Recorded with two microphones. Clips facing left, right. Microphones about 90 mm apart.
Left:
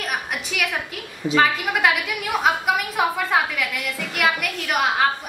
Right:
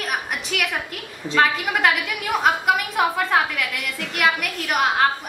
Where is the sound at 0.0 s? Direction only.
Centre (ahead or behind).